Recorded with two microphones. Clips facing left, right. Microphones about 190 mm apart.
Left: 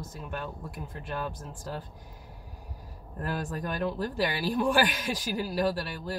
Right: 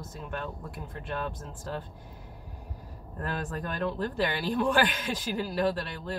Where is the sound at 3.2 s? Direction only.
10° left (ahead or behind).